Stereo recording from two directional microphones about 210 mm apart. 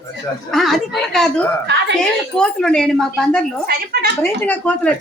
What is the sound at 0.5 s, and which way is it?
Speech, centre (ahead or behind).